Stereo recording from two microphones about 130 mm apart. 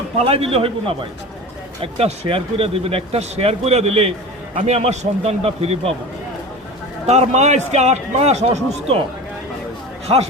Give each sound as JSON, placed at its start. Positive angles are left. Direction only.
{"t": 0.2, "sound": "a man's voice", "side_deg": -50}
{"t": 7.1, "sound": "a man's voice", "side_deg": -60}
{"t": 10.1, "sound": "a man's voice", "side_deg": -40}